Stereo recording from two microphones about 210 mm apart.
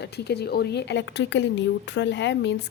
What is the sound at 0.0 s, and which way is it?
Speech, 50° left (ahead or behind).